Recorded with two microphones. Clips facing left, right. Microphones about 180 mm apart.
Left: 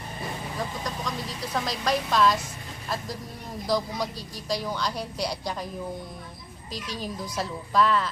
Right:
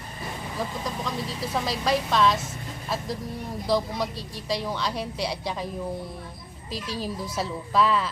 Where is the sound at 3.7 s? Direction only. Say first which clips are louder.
Right 2 dB; centre (ahead or behind).